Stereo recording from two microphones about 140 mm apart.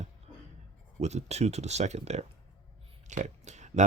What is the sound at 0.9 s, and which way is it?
Speech, 55° right (ahead or behind).